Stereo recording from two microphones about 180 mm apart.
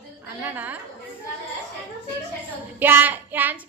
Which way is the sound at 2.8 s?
10° right (ahead or behind).